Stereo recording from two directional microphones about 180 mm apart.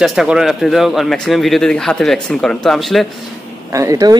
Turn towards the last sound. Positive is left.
turn(degrees=-20)  # may be behind; listen again after turning